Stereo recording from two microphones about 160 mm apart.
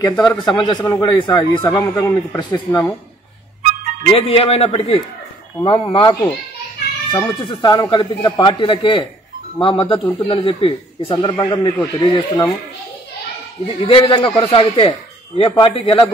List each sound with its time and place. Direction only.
0.0 s speech: 25° left (ahead or behind)
1.6 s speech: 15° left (ahead or behind)
3.6 s music: 50° right (ahead or behind)
4.1 s speech: 35° left (ahead or behind)
13.8 s speech: 30° left (ahead or behind)